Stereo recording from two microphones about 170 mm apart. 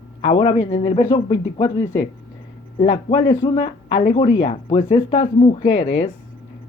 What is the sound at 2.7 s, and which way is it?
Speech, 35° left (ahead or behind).